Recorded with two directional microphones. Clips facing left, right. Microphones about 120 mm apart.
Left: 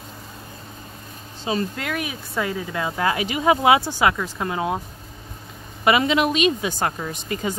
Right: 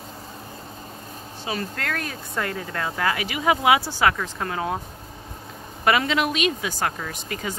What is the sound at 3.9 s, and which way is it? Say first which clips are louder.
Speech: left 1 dB; 15° left (ahead or behind).